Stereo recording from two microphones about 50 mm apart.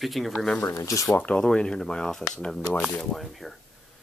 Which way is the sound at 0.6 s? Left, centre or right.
Left.